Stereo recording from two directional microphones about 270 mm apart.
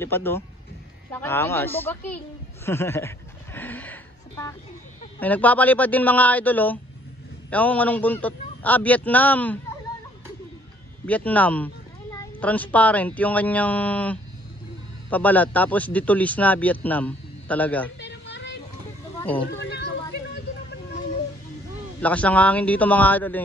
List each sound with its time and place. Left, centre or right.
0.0 s a woman's voice: centre
11.1 s speech: centre
18.0 s a sound: left
19.1 s a sound: centre
19.4 s speech: left
22.0 s speech: centre